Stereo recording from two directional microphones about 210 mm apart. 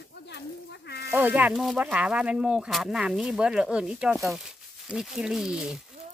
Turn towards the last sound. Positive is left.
turn(degrees=-5)  # may be behind; listen again after turning